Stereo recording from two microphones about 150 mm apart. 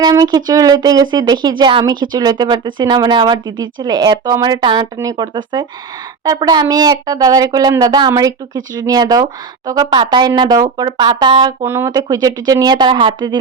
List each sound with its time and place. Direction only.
0.0 s speech: 25° right (ahead or behind)
11.6 s speech: 15° right (ahead or behind)
11.9 s speech: 30° right (ahead or behind)